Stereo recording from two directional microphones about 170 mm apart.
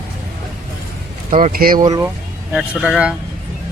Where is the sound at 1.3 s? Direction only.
45° right (ahead or behind).